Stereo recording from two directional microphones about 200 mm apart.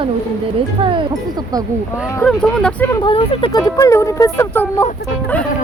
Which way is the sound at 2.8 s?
25° left (ahead or behind).